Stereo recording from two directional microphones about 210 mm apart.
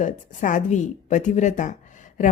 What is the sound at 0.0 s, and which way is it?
A woman's voice, 40° left (ahead or behind).